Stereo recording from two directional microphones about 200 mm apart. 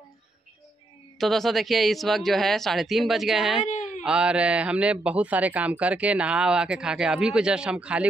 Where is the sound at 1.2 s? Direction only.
Centre (ahead or behind).